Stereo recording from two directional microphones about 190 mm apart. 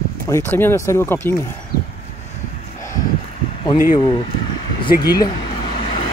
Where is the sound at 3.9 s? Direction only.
25° left (ahead or behind).